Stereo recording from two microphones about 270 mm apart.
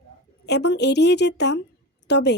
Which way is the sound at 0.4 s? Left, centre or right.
Left.